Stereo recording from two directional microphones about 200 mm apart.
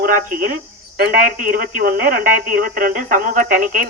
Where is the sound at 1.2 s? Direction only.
45° right (ahead or behind).